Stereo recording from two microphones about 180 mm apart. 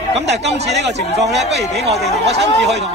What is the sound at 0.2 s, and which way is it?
Speech, 75° right (ahead or behind).